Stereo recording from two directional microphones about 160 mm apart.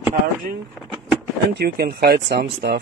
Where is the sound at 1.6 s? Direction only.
75° right (ahead or behind); by 2.8 s 90° right.